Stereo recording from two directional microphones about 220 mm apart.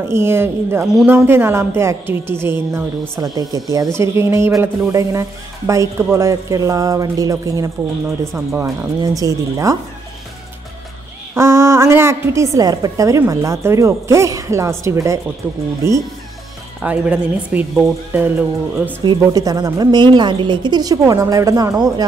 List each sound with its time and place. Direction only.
0.1 s a woman's voice: 10° right (ahead or behind)
11.3 s a woman's voice: 15° right (ahead or behind)